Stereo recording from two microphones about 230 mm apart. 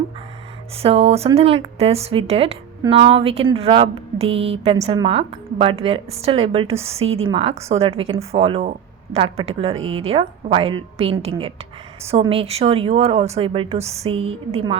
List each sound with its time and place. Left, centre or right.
0.8 s speech: right
7.0 s a woman's voice: right
7.3 s speech: right